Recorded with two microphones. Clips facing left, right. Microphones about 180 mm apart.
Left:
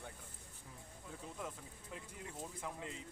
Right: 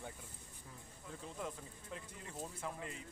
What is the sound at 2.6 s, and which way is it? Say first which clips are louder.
Speech: even; 20° left (ahead or behind).